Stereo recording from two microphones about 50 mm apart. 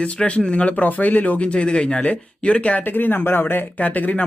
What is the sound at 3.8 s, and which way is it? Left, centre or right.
Speech, left.